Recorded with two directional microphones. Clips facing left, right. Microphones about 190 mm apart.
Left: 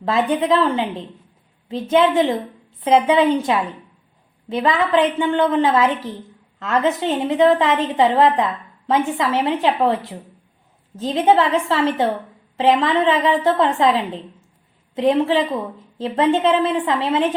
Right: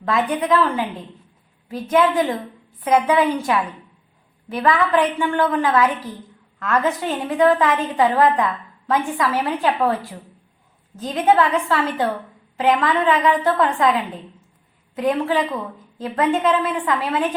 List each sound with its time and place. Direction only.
0.0 s a woman's voice: 30° left (ahead or behind)